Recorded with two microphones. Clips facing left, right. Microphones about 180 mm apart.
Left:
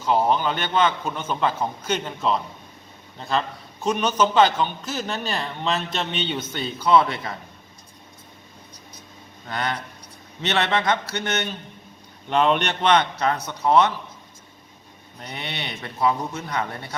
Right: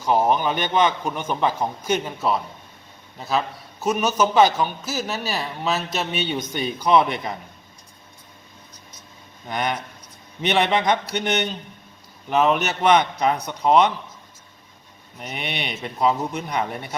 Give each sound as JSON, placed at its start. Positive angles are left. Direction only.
{"t": 0.0, "sound": "a man's voice", "side_deg": -15}
{"t": 9.5, "sound": "a man's voice", "side_deg": -15}
{"t": 12.3, "sound": "a man's voice", "side_deg": -5}
{"t": 15.2, "sound": "a man's voice", "side_deg": -15}